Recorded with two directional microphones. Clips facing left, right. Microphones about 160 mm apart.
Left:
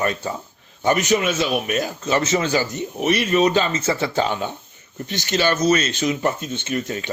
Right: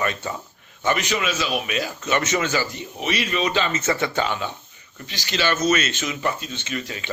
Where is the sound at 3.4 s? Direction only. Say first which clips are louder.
Left 4 dB; 40° left (ahead or behind).